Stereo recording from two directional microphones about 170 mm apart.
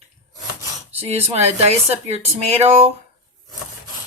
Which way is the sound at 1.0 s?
40° right (ahead or behind).